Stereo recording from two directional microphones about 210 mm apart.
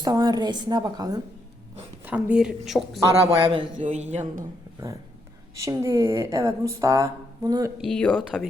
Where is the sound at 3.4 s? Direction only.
25° right (ahead or behind); by 4.5 s 40° right (ahead or behind).